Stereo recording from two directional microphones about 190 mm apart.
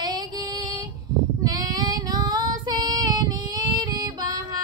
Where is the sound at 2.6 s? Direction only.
20° right (ahead or behind).